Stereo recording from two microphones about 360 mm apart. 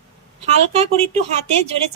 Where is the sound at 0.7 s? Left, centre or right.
Centre.